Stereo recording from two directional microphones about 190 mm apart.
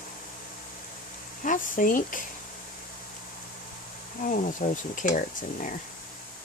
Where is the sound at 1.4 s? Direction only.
45° left (ahead or behind).